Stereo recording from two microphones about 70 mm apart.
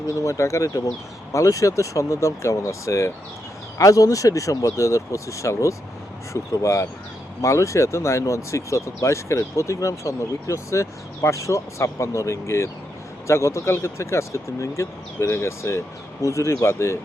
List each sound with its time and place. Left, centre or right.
0.2 s speech: left